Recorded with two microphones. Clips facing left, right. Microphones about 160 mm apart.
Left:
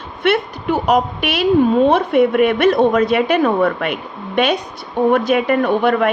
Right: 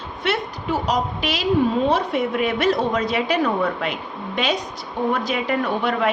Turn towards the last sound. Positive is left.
turn(degrees=55)  # may be behind; listen again after turning